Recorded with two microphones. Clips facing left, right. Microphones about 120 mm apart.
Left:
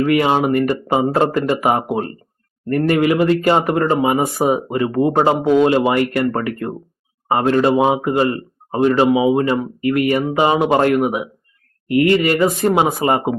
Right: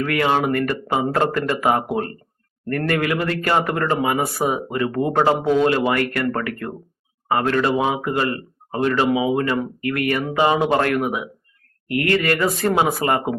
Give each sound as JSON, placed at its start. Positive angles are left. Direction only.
{"t": 0.0, "sound": "speech", "side_deg": 20}